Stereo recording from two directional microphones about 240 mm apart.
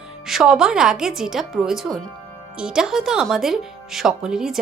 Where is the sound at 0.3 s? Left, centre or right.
Centre.